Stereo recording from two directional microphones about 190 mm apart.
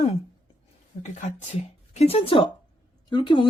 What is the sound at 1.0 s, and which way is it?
Speech, 35° left (ahead or behind).